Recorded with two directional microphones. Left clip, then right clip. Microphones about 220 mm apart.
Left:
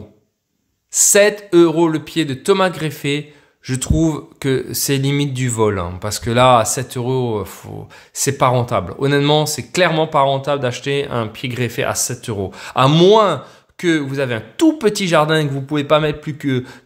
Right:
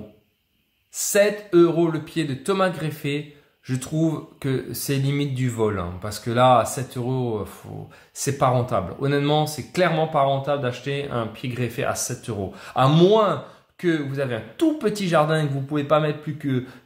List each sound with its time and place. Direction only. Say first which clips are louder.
0.9 s speech: left 7 dB; 45° left (ahead or behind)